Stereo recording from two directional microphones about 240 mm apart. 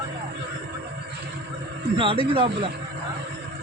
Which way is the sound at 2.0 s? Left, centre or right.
Right.